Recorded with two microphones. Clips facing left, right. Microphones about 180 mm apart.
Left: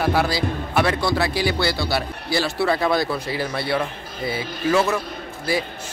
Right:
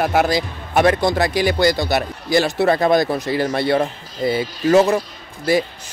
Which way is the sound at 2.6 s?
45° right (ahead or behind).